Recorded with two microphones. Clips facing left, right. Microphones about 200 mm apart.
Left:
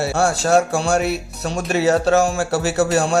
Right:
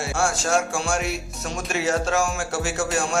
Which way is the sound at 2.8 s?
65° left (ahead or behind).